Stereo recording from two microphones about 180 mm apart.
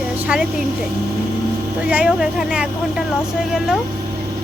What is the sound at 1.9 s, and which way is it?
Speech, 5° right (ahead or behind).